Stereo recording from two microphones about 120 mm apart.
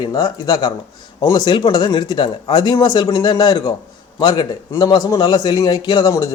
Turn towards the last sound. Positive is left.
turn(degrees=35)  # may be behind; listen again after turning